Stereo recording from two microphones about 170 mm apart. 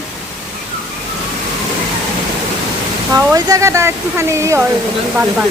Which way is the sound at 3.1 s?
20° right (ahead or behind).